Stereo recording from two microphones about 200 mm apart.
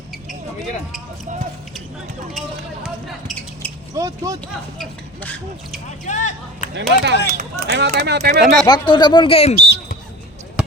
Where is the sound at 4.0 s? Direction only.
15° right (ahead or behind).